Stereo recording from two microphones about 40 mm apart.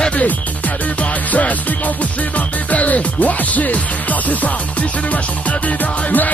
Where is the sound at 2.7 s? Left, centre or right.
Left.